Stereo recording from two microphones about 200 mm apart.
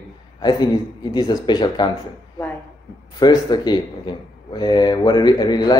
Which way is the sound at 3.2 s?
20° left (ahead or behind).